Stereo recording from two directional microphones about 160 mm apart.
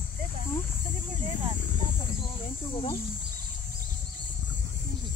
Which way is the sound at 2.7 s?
35° left (ahead or behind).